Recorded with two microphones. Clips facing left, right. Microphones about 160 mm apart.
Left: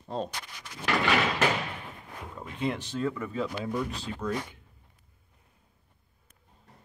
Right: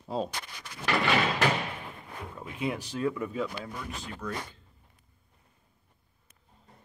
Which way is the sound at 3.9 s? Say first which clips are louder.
Left 4 dB; 35° left (ahead or behind).